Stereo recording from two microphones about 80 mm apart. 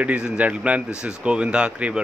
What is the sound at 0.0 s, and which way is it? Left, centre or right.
Speech, centre.